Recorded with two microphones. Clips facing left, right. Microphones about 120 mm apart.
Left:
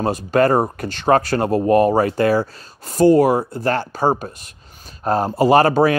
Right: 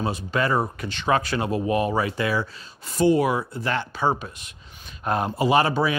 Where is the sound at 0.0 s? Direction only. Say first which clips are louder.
Left 8 dB; 45° left (ahead or behind).